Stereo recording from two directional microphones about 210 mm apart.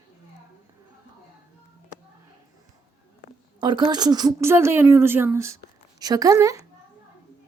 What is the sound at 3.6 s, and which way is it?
A woman's voice, 20° right (ahead or behind).